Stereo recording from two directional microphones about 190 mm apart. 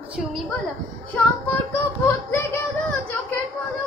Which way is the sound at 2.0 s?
15° left (ahead or behind).